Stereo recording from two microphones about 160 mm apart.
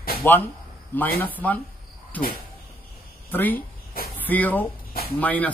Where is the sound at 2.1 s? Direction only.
10° left (ahead or behind).